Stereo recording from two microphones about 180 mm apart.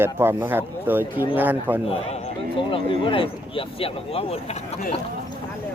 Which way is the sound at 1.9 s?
35° left (ahead or behind).